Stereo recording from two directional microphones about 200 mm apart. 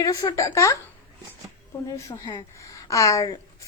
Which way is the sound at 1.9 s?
15° left (ahead or behind).